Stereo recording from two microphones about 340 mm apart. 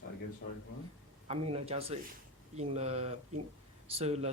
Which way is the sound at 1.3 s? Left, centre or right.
Centre.